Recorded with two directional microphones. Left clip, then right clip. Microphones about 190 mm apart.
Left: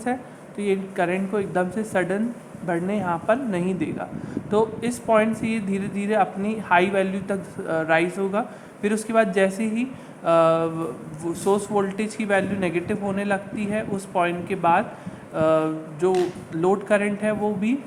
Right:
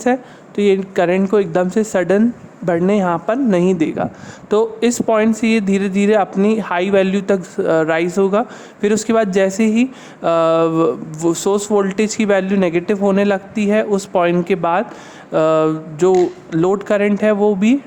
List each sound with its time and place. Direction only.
0.0 s speech: 55° right (ahead or behind)